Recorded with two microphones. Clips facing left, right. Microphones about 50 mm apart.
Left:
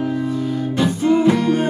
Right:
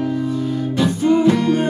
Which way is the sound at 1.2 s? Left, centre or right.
Centre.